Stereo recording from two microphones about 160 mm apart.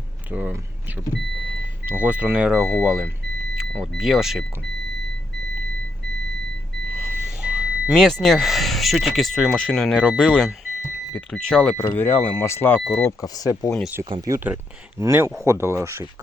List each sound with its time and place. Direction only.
0.3 s speech: 10° right (ahead or behind)
1.9 s speech: 10° right (ahead or behind)
7.3 s speech: 5° right (ahead or behind); by 13.7 s 20° left (ahead or behind)
14.0 s speech: 25° right (ahead or behind)